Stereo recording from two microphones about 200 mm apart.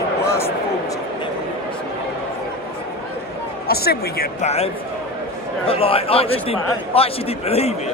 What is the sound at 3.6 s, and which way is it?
Speech, 50° left (ahead or behind).